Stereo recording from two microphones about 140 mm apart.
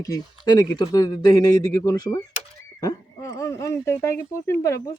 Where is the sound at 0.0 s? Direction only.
25° left (ahead or behind).